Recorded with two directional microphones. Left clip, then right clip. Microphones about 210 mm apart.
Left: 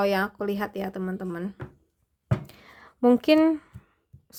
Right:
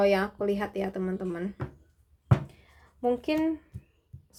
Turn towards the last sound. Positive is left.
turn(degrees=50)  # may be behind; listen again after turning